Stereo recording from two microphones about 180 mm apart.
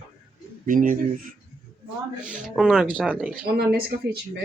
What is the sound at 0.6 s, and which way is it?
Speech, 50° right (ahead or behind).